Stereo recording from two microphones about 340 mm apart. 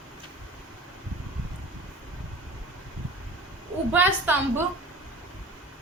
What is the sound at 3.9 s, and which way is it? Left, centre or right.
Speech, centre.